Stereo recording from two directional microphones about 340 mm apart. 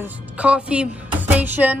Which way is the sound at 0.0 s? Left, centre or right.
Centre.